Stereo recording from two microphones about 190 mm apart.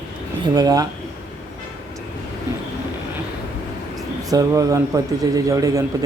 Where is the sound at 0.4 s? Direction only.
20° right (ahead or behind).